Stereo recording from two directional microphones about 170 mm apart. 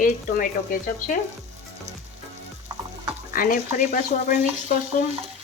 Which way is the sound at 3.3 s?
55° left (ahead or behind).